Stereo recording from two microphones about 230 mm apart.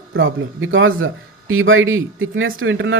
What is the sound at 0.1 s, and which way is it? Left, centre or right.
Speech, right.